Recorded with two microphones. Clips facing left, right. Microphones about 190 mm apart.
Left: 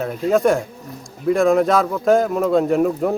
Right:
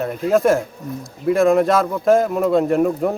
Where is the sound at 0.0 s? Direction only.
Centre (ahead or behind).